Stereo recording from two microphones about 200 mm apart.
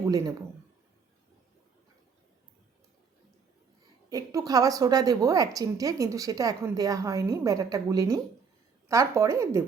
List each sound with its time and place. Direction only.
0.0 s speech: 15° right (ahead or behind)
4.1 s a woman's voice: 15° right (ahead or behind)